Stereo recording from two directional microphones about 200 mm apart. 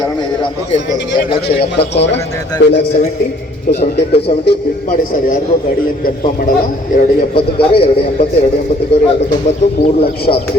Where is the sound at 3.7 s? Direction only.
55° left (ahead or behind).